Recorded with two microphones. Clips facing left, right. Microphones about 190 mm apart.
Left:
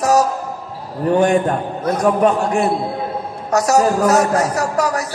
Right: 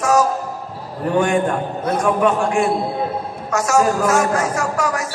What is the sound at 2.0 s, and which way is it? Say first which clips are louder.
A man's voice: left 3 dB; 35° left (ahead or behind).